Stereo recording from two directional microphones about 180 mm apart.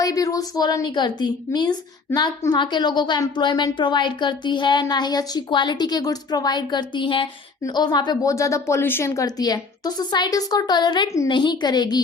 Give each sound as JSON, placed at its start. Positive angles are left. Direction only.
{"t": 0.0, "sound": "a woman's voice", "side_deg": 20}